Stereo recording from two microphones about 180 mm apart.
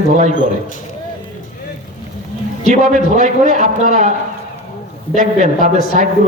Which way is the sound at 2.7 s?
45° right (ahead or behind).